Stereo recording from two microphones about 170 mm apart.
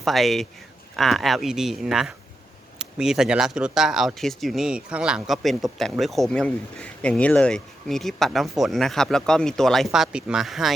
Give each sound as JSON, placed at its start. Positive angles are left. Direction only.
{"t": 0.0, "sound": "speech", "side_deg": 0}